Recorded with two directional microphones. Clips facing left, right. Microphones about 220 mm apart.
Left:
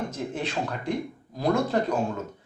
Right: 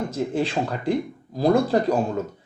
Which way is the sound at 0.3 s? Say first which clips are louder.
Right 6 dB; 30° right (ahead or behind).